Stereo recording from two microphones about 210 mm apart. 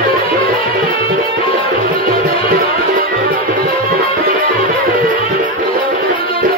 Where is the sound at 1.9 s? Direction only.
45° right (ahead or behind).